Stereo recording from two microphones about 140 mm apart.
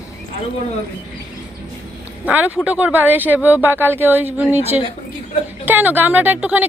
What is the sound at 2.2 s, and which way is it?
Speech, 10° right (ahead or behind).